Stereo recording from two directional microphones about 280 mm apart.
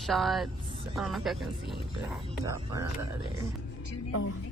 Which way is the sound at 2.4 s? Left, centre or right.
Centre.